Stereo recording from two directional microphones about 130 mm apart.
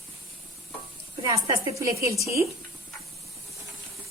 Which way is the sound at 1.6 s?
25° right (ahead or behind).